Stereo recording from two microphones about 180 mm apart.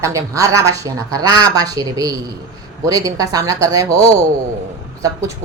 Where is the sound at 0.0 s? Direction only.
15° right (ahead or behind).